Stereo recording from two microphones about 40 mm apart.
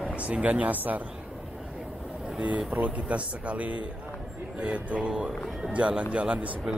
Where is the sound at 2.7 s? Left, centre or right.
Right.